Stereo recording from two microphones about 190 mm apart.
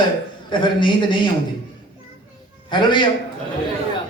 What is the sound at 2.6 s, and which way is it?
Speech, 25° left (ahead or behind).